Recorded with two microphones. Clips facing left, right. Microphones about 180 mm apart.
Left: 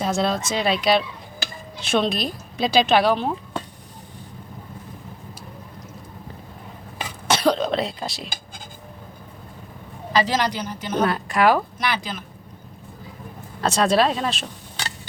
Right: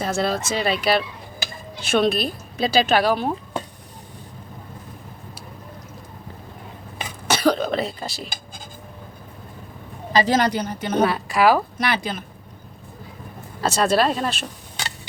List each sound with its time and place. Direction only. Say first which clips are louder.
0.0 s speech: even; 5° right (ahead or behind)
7.3 s speech: even; 5° right (ahead or behind)
10.1 s speech: right 3 dB; 50° right (ahead or behind)
11.0 s speech: right 1 dB; 5° right (ahead or behind)
11.8 s speech: right 2 dB; 60° right (ahead or behind)
13.6 s speech: even; 5° right (ahead or behind)